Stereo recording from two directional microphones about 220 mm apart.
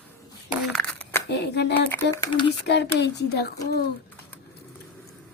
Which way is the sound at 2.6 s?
50° left (ahead or behind).